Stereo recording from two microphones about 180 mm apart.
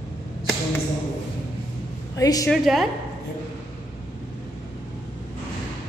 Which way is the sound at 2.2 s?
20° left (ahead or behind).